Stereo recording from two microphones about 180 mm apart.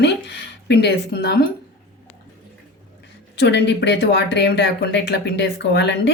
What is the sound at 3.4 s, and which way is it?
A woman's voice, 70° left (ahead or behind).